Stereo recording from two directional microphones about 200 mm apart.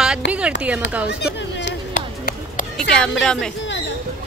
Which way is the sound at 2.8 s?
5° left (ahead or behind).